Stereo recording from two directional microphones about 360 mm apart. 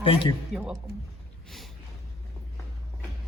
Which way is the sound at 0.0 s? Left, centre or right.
Centre.